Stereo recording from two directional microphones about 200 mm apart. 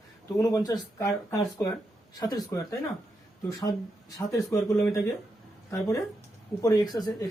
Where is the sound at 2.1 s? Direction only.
20° left (ahead or behind).